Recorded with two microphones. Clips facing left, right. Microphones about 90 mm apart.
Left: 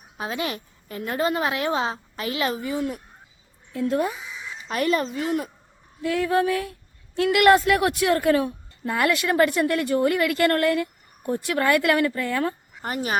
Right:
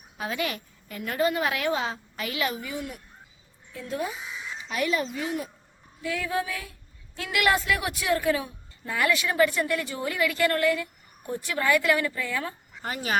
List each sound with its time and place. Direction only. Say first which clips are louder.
0.2 s a woman's voice: left 2 dB; 25° left (ahead or behind)
3.7 s a woman's voice: left 8 dB; 55° left (ahead or behind)
12.8 s speech: left 3 dB; 30° left (ahead or behind)